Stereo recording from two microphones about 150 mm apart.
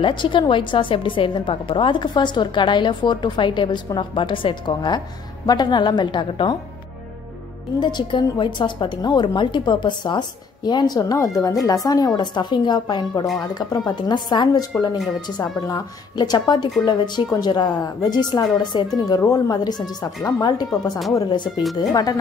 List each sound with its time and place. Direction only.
0.0 s a woman's voice: 30° left (ahead or behind)
7.8 s a woman's voice: 30° left (ahead or behind)